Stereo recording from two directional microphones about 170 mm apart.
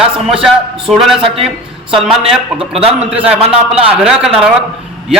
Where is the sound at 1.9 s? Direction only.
5° right (ahead or behind).